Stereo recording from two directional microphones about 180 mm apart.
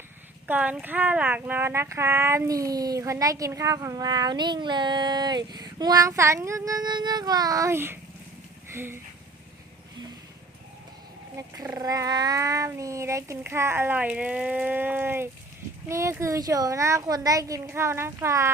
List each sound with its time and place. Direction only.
0.4 s speech: 10° right (ahead or behind)
8.7 s a sound: 15° right (ahead or behind)
11.3 s cat: 20° right (ahead or behind)